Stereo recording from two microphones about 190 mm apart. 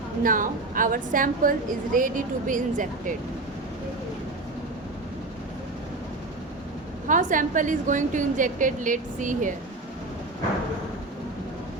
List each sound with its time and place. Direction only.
0.2 s a woman's voice: 45° right (ahead or behind)
7.1 s a woman's voice: 45° right (ahead or behind)